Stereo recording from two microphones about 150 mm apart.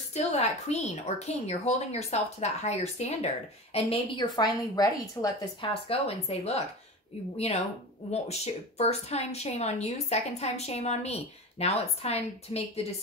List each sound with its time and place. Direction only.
0.1 s speech: 45° left (ahead or behind)
3.7 s a woman's voice: 35° left (ahead or behind)
5.6 s speech: 40° left (ahead or behind)
8.1 s speech: 45° left (ahead or behind)